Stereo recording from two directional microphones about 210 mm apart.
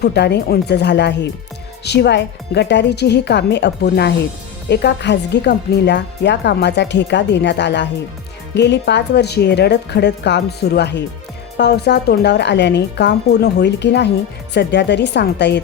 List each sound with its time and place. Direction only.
0.0 s speech: 50° left (ahead or behind)